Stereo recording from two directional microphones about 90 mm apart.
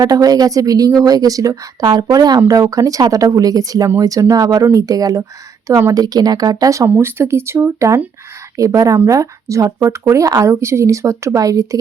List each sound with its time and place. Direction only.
0.0 s a woman's voice: 45° right (ahead or behind)